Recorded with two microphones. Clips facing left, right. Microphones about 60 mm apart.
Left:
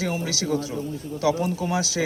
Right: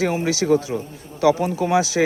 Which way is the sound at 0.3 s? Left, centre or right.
Right.